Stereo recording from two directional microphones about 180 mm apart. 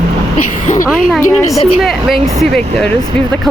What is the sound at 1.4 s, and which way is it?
Speech, 20° left (ahead or behind).